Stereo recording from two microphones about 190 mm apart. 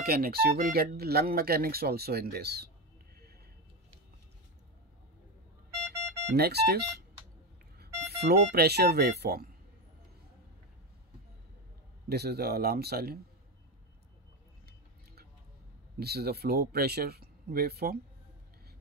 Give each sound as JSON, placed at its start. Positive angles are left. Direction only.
{"t": 0.0, "sound": "speech", "side_deg": -55}
{"t": 6.3, "sound": "speech", "side_deg": -55}
{"t": 12.1, "sound": "speech", "side_deg": -55}
{"t": 16.0, "sound": "speech", "side_deg": -55}